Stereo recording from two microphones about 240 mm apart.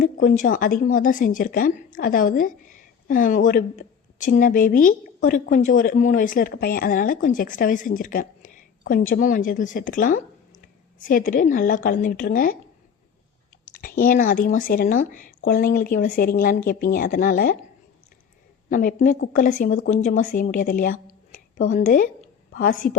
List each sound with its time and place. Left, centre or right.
0.0 s a woman's voice: left
13.8 s a woman's voice: left
18.7 s a woman's voice: left